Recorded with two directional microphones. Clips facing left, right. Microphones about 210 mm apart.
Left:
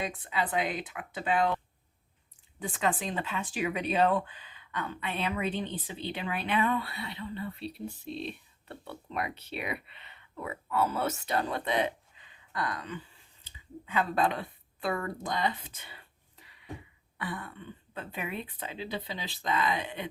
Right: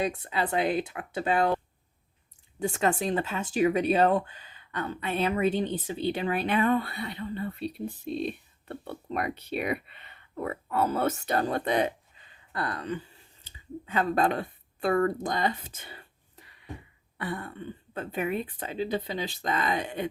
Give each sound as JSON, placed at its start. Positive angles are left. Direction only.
{"t": 0.0, "sound": "speech", "side_deg": -40}